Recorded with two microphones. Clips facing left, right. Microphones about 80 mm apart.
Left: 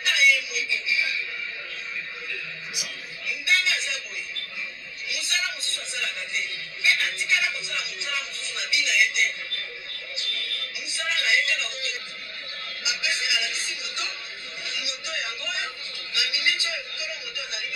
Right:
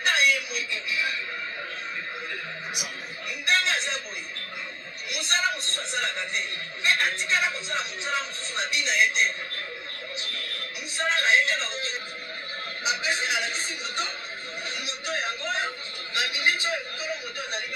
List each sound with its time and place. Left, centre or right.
0.0 s a sound: right
2.2 s a man's voice: right
5.1 s a man's voice: right
10.1 s music: right
12.8 s a man's voice: right
14.7 s a sound: right